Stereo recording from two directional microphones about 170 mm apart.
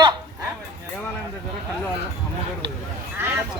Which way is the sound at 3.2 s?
10° right (ahead or behind).